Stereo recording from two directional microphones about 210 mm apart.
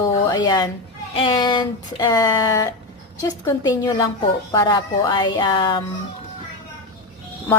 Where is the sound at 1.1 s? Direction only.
20° left (ahead or behind).